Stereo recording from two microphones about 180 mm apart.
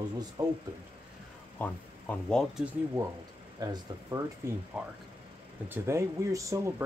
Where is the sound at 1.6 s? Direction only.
5° left (ahead or behind).